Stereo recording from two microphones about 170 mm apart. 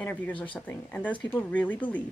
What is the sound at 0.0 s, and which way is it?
A woman's voice, 10° left (ahead or behind).